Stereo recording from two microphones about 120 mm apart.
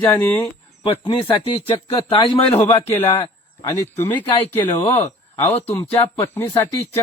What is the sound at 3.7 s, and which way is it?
Speech, 20° left (ahead or behind).